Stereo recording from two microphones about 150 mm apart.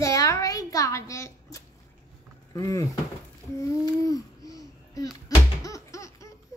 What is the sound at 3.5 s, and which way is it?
Babbling, 20° left (ahead or behind).